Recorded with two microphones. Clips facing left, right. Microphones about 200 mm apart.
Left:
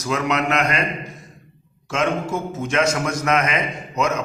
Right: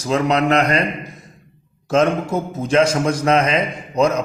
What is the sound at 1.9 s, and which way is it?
A man's voice, 35° right (ahead or behind).